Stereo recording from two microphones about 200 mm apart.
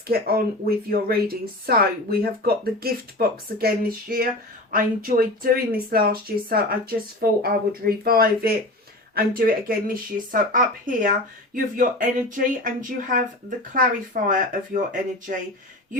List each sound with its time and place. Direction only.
0.1 s speech: 50° right (ahead or behind)